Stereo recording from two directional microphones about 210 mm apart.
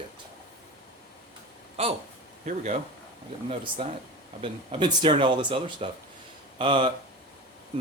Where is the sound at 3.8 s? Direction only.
25° right (ahead or behind).